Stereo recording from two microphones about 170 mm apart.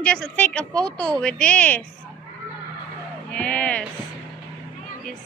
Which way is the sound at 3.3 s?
5° left (ahead or behind).